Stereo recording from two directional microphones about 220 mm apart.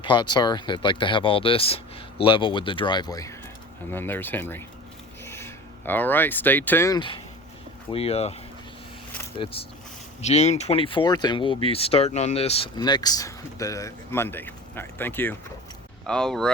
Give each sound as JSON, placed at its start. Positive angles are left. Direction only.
{"t": 0.0, "sound": "speech", "side_deg": 20}
{"t": 9.4, "sound": "speech", "side_deg": 25}